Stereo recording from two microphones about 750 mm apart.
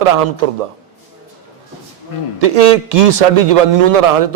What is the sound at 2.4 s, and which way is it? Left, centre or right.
A man's voice, right.